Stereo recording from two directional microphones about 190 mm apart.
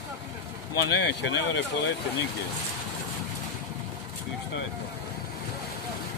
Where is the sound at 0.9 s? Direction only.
65° left (ahead or behind).